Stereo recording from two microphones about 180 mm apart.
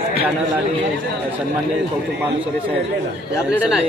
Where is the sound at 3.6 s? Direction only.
5° right (ahead or behind).